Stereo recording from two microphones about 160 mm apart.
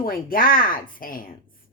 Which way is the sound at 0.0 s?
65° left (ahead or behind).